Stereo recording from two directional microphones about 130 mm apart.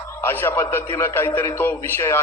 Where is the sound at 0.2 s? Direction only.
15° left (ahead or behind).